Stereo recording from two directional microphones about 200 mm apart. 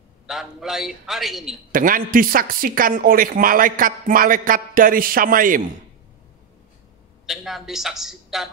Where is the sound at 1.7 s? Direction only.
45° right (ahead or behind).